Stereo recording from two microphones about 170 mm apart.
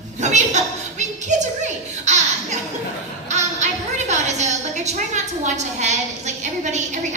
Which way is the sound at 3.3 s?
45° right (ahead or behind).